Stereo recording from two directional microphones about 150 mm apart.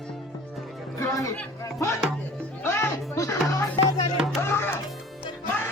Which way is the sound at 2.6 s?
15° left (ahead or behind).